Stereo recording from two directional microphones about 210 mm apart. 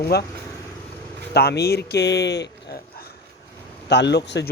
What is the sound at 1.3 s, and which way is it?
Speech, 50° left (ahead or behind).